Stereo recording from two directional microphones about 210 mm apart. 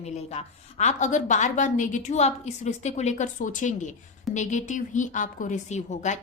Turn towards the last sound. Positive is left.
turn(degrees=35)  # may be behind; listen again after turning